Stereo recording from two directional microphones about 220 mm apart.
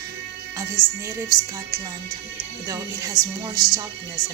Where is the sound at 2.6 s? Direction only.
15° right (ahead or behind).